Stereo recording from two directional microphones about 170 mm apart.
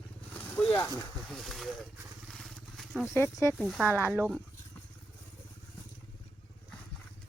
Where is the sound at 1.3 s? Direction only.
Centre (ahead or behind).